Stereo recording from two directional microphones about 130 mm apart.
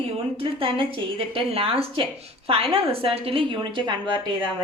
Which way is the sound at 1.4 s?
45° right (ahead or behind).